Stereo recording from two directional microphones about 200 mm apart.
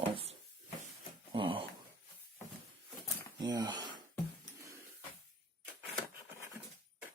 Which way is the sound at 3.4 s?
20° right (ahead or behind).